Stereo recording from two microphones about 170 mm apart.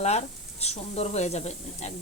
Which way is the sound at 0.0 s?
40° left (ahead or behind).